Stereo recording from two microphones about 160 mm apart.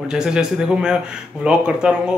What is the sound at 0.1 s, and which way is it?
Speech, 5° right (ahead or behind).